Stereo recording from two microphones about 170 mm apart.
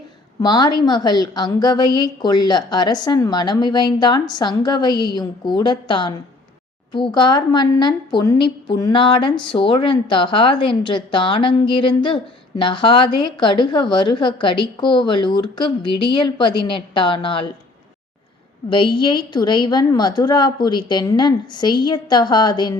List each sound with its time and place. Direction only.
0.4 s a woman's voice: 25° left (ahead or behind)
18.7 s a woman's voice: 30° left (ahead or behind)